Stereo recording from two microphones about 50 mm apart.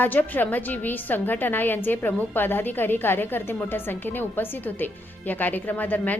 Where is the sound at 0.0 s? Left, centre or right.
Left.